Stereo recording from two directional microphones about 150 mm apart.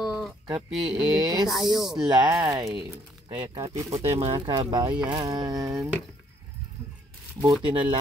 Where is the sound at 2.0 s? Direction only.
30° right (ahead or behind).